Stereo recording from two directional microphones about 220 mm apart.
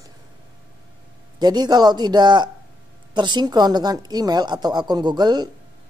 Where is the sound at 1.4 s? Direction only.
20° right (ahead or behind).